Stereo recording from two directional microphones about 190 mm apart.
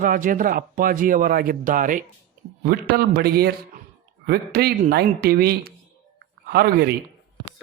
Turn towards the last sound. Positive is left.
turn(degrees=-55)  # may be behind; listen again after turning